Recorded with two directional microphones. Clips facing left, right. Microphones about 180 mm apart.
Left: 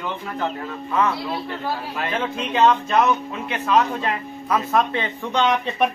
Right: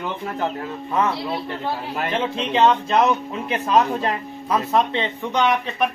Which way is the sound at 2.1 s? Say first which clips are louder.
Right 1 dB; 25° right (ahead or behind).